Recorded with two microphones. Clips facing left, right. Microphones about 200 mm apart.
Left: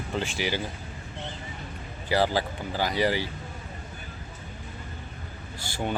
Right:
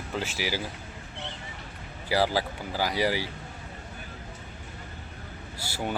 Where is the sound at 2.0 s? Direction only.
10° right (ahead or behind).